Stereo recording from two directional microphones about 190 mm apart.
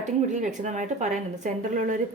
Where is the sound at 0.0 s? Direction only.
40° right (ahead or behind).